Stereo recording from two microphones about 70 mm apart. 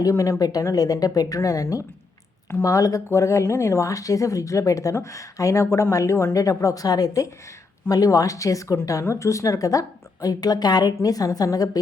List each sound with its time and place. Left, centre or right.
0.0 s speech: left
2.5 s speech: left
2.7 s speech: left